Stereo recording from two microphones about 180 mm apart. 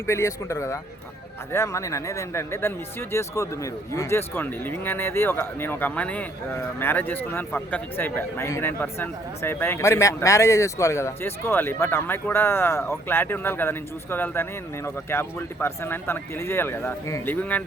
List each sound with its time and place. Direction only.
0.1 s speech: 15° left (ahead or behind)